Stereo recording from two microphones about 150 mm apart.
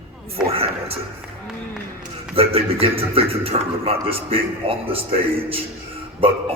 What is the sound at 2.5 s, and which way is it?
A man's voice, 40° right (ahead or behind).